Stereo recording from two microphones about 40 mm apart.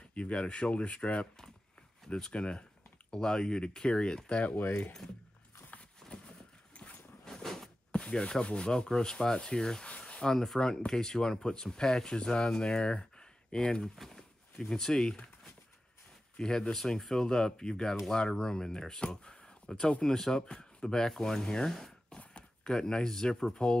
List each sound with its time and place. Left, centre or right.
0.1 s speech: left
2.1 s speech: left
4.5 s speech: left
7.2 s a sound: centre
7.9 s speech: left
9.8 s a sound: left
10.2 s speech: centre
13.9 s speech: centre
16.3 s speech: centre
19.0 s a sound: left
20.0 s speech: centre
22.1 s a sound: left
22.7 s speech: centre